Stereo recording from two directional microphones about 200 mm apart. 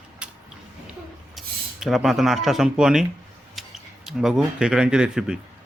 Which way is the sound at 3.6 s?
Centre (ahead or behind).